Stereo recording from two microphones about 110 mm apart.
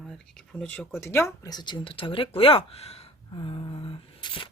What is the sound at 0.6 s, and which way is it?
Speech, 15° left (ahead or behind).